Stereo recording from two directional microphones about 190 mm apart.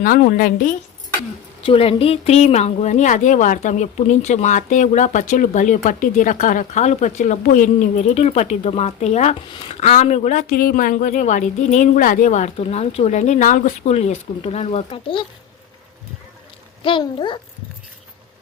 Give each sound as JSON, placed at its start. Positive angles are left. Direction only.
{"t": 0.0, "sound": "a woman's voice", "side_deg": 45}
{"t": 1.6, "sound": "speech", "side_deg": 30}
{"t": 16.8, "sound": "a child's voice", "side_deg": 25}